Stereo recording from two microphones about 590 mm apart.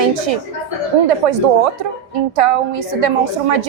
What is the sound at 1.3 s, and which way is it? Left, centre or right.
A woman's voice, right.